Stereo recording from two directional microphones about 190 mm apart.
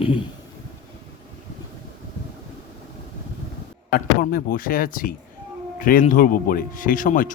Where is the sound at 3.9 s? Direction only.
50° left (ahead or behind).